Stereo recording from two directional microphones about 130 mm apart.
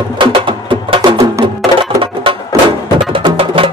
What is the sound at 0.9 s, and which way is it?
Music, 45° right (ahead or behind).